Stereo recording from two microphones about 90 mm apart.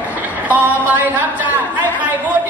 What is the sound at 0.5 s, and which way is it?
Speech, 20° right (ahead or behind).